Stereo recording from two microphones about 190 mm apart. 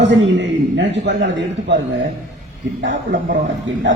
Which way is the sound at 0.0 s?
70° right (ahead or behind).